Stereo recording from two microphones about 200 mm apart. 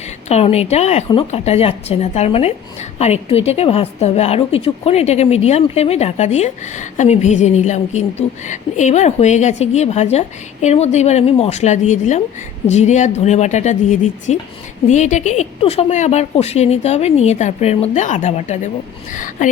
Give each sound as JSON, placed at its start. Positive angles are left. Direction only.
{"t": 0.3, "sound": "a woman's voice", "side_deg": 30}